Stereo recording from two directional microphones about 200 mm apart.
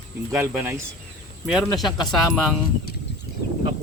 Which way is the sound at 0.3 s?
15° right (ahead or behind).